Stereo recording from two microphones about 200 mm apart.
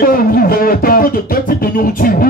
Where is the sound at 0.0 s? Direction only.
45° left (ahead or behind).